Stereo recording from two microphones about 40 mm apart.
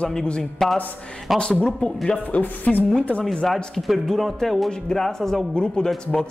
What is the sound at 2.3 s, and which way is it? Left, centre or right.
Speech, left.